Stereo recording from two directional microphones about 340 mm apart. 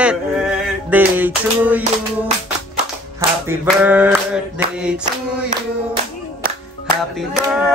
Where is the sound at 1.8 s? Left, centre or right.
Centre.